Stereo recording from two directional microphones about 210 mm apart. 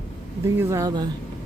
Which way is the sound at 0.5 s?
15° right (ahead or behind).